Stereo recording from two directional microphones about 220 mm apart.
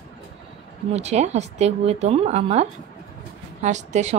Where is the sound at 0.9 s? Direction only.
30° right (ahead or behind).